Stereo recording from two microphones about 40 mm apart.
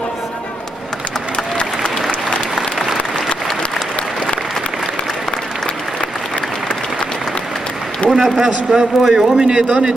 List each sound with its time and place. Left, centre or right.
8.1 s a man's voice: centre